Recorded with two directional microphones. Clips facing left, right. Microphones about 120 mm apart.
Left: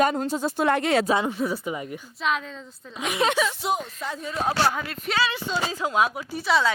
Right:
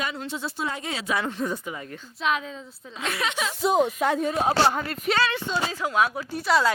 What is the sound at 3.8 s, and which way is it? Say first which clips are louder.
Speech: right 11 dB; 65° right (ahead or behind).